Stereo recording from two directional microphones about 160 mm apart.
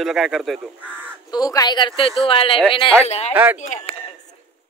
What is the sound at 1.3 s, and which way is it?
A woman's voice, 25° left (ahead or behind).